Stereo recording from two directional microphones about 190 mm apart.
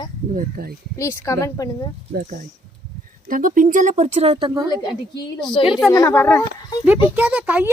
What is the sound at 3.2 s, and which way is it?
Speech, 45° right (ahead or behind).